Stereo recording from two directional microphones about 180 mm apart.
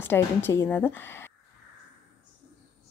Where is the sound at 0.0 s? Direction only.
10° left (ahead or behind).